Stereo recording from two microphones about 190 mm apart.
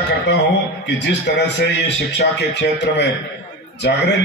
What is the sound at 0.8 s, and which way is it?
A man's voice, 65° left (ahead or behind).